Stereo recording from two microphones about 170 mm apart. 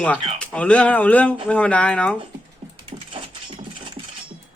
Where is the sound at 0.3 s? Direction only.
5° left (ahead or behind).